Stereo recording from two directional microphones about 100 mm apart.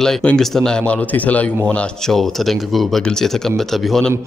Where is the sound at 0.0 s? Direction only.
10° left (ahead or behind).